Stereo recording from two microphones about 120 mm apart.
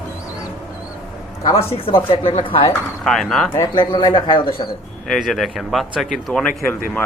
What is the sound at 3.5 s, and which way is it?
Speech, 35° left (ahead or behind).